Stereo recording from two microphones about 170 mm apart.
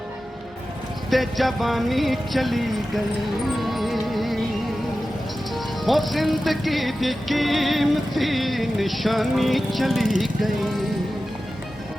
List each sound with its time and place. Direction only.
1.1 s music: centre (ahead or behind)
5.5 s music: centre (ahead or behind)